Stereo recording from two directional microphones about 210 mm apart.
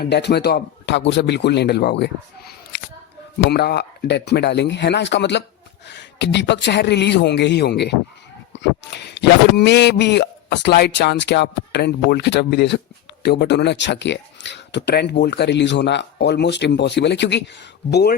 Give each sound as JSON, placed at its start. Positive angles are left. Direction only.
{"t": 0.0, "sound": "speech", "side_deg": 50}